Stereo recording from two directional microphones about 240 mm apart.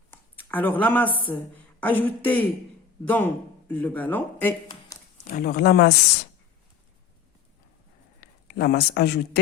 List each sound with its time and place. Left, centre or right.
0.1 s a man's voice: centre
5.1 s speech: left
8.2 s speech: left